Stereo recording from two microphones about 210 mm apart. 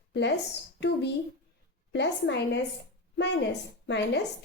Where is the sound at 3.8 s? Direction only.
55° left (ahead or behind).